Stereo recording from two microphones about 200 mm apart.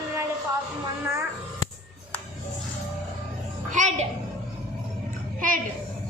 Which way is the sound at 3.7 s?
35° right (ahead or behind).